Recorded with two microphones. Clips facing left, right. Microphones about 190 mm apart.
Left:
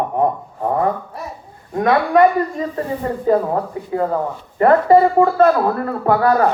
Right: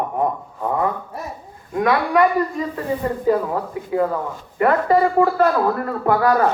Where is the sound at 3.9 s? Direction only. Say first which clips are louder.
Left 1 dB; 30° left (ahead or behind).